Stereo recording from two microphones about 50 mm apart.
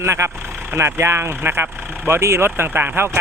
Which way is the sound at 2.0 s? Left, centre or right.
Right.